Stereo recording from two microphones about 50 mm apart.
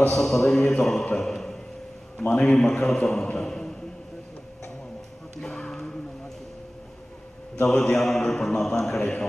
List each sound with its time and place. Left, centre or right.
0.1 s a man's voice: centre
5.5 s a sound: centre
7.6 s a man's voice: centre